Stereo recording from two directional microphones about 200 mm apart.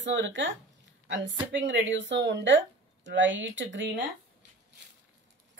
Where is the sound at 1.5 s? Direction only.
65° right (ahead or behind).